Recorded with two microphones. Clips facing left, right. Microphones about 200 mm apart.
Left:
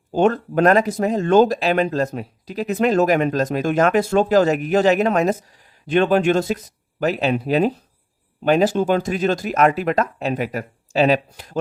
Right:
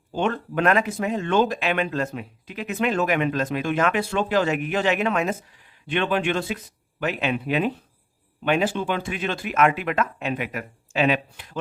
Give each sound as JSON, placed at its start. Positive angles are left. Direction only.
{"t": 0.1, "sound": "speech", "side_deg": 40}